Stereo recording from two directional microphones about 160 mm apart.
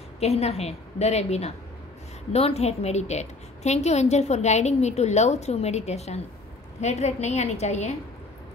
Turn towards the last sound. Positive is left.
turn(degrees=45)  # may be behind; listen again after turning